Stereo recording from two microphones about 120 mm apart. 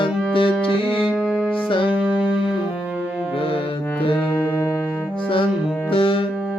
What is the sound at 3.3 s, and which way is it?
Music, 50° left (ahead or behind).